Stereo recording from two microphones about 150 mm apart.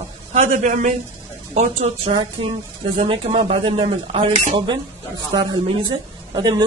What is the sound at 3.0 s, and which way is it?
Speech, 40° right (ahead or behind).